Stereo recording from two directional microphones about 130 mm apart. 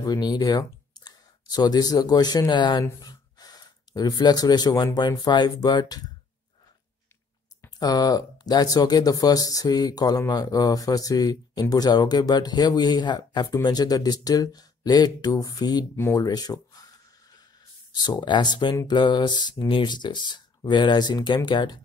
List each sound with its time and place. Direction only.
0.0 s speech: 30° left (ahead or behind)
7.8 s speech: 30° left (ahead or behind)
17.9 s speech: 35° left (ahead or behind)